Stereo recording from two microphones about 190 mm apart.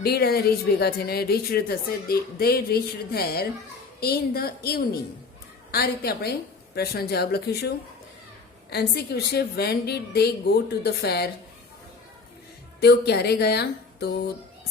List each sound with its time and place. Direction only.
0.0 s speech: 55° left (ahead or behind)
8.7 s speech: 55° left (ahead or behind)
12.8 s speech: 60° left (ahead or behind)